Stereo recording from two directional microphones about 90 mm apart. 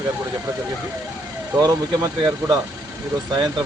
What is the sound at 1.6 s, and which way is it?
Speech, 50° right (ahead or behind).